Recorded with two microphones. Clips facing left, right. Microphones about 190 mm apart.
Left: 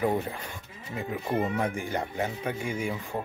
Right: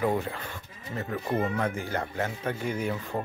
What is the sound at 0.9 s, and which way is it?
Speech, 15° left (ahead or behind).